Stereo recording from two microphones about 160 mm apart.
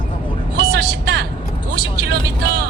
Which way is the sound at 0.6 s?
80° right.